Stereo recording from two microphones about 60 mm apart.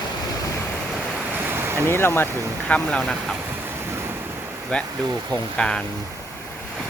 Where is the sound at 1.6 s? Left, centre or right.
Right.